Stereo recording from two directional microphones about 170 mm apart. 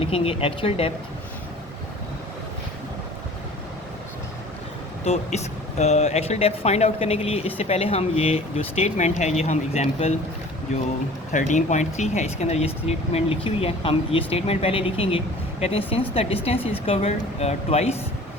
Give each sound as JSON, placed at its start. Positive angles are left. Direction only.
{"t": 0.0, "sound": "speech", "side_deg": 35}
{"t": 5.0, "sound": "speech", "side_deg": 40}
{"t": 11.3, "sound": "speech", "side_deg": 45}